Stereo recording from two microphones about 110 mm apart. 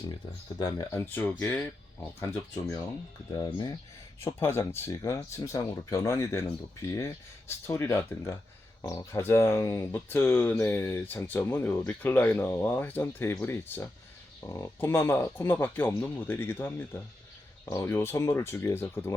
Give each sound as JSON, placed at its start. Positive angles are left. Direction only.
{"t": 0.6, "sound": "speech", "side_deg": 30}
{"t": 3.3, "sound": "speech", "side_deg": 40}
{"t": 4.2, "sound": "speech", "side_deg": 20}
{"t": 8.8, "sound": "speech", "side_deg": 35}